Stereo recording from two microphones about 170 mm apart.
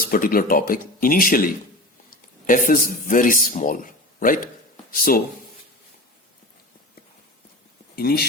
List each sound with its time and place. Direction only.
0.0 s speech: 55° left (ahead or behind)
2.5 s a man's voice: 55° left (ahead or behind)
7.9 s speech: 65° left (ahead or behind)